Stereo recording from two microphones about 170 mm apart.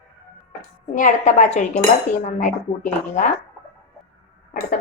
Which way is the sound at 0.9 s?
45° left (ahead or behind).